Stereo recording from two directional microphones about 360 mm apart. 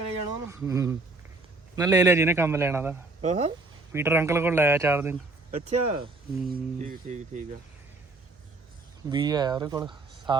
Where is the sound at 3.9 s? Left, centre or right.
Centre.